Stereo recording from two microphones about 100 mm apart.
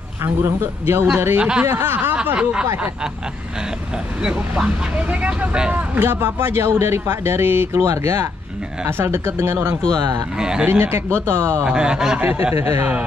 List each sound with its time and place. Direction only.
0.2 s speech: 25° right (ahead or behind)
2.2 s speech: 10° right (ahead or behind)
4.2 s speech: 10° right (ahead or behind); by 9.8 s 25° right (ahead or behind)
9.9 s speech: 40° right (ahead or behind)
10.3 s speech: 10° right (ahead or behind)
10.7 s speech: 25° right (ahead or behind)
11.6 s speech: 10° right (ahead or behind)
12.2 s speech: 20° right (ahead or behind)